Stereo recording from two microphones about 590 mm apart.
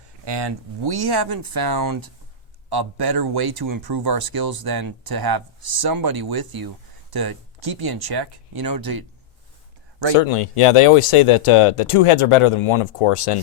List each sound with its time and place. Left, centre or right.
0.3 s speech: right
10.2 s speech: left